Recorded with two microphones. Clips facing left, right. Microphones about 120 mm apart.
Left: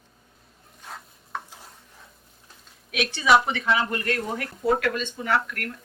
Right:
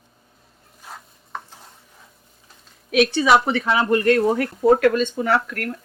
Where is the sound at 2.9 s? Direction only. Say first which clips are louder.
Right 4 dB; 40° right (ahead or behind).